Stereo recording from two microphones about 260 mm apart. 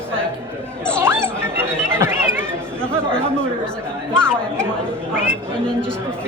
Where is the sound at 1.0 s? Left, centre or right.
Centre.